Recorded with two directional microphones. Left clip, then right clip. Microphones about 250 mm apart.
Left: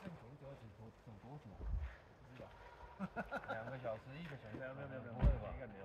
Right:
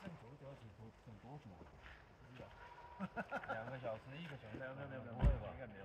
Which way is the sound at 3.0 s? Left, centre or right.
Centre.